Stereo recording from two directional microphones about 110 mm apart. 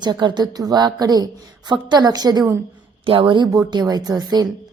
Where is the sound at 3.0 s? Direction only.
50° right (ahead or behind); by 4.5 s 35° right (ahead or behind).